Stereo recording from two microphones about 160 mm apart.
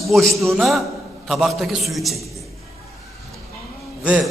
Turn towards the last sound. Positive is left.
turn(degrees=-5)  # may be behind; listen again after turning